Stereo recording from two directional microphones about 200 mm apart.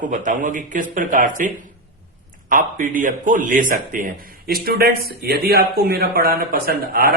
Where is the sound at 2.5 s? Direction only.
45° right (ahead or behind).